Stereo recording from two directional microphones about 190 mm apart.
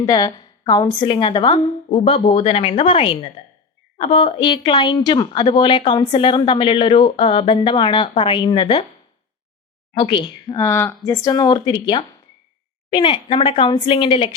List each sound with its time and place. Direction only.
0.0 s a woman's voice: 25° left (ahead or behind)
9.9 s a woman's voice: 25° left (ahead or behind)